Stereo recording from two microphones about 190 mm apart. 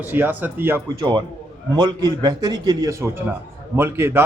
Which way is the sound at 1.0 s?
25° right (ahead or behind).